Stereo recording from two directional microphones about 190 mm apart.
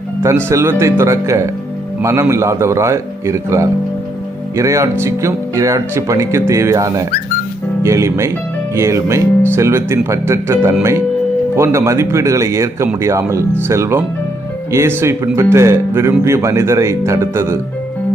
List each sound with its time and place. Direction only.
0.2 s speech: 15° right (ahead or behind)